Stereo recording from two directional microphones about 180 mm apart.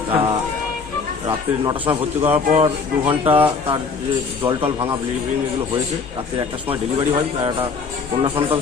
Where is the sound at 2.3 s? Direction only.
35° right (ahead or behind).